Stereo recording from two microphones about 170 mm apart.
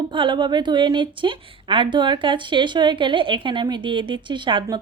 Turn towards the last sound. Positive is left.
turn(degrees=-30)  # may be behind; listen again after turning